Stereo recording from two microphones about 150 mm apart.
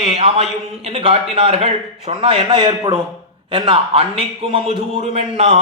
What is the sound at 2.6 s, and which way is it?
Speech, 25° right (ahead or behind).